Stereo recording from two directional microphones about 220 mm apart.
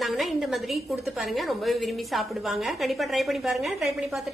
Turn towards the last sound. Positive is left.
turn(degrees=0)  # may be behind; listen again after turning